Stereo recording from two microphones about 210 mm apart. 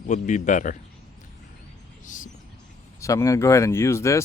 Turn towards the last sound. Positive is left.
turn(degrees=15)  # may be behind; listen again after turning